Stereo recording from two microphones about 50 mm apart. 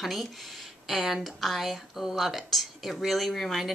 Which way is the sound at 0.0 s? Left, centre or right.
Centre.